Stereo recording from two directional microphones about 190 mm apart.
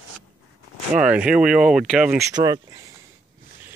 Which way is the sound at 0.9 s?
5° right (ahead or behind).